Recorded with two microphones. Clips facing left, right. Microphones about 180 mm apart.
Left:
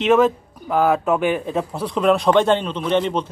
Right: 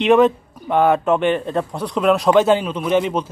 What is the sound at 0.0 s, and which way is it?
Speech, centre (ahead or behind).